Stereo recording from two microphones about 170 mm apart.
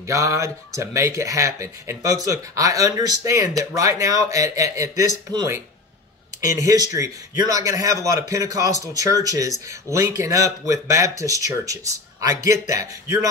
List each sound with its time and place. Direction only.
0.0 s speech: 15° right (ahead or behind)